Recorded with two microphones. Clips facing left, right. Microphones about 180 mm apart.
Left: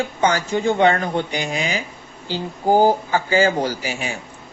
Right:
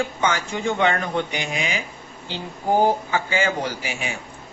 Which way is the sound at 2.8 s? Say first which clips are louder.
Left 3 dB; 35° left (ahead or behind).